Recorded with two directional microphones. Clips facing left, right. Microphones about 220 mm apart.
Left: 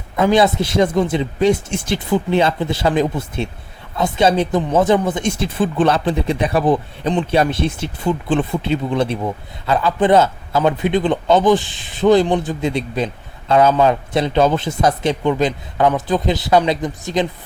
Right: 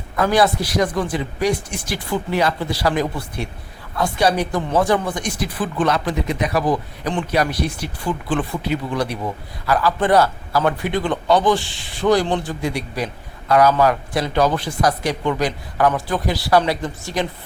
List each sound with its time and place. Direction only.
0.2 s speech: 20° left (ahead or behind)